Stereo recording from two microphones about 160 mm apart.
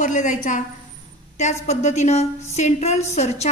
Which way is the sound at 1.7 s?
45° left (ahead or behind).